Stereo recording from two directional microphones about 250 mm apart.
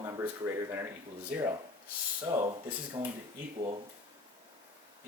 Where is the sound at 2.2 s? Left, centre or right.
Centre.